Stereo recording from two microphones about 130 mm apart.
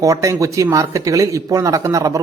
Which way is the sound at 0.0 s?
25° right (ahead or behind).